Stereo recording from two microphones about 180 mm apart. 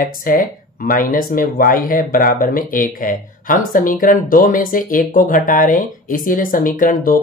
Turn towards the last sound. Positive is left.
turn(degrees=50)  # may be behind; listen again after turning